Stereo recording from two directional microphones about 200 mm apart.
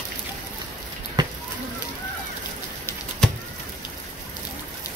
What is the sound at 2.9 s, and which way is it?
Pigeon, 5° left (ahead or behind).